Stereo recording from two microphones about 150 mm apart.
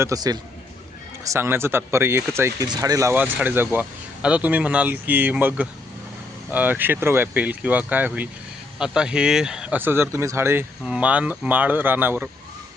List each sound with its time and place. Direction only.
0.0 s a man's voice: 25° right (ahead or behind)